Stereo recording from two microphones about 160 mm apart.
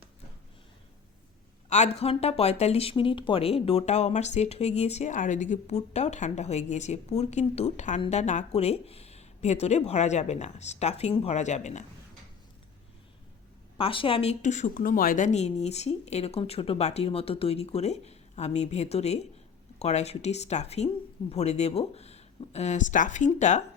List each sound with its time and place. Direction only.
1.7 s speech: 45° left (ahead or behind)
13.7 s speech: 35° left (ahead or behind)